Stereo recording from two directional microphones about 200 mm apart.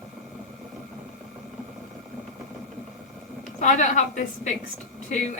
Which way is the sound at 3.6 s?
40° left (ahead or behind).